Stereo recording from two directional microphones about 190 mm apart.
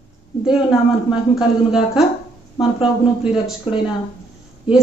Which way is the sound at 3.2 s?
5° right (ahead or behind).